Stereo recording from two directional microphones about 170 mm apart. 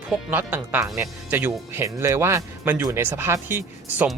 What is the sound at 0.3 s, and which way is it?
Speech, 10° right (ahead or behind).